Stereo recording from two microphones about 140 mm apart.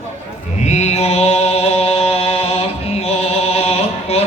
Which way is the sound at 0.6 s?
55° left (ahead or behind).